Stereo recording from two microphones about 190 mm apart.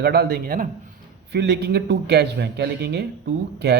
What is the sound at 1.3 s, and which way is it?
A man's voice, 60° right (ahead or behind).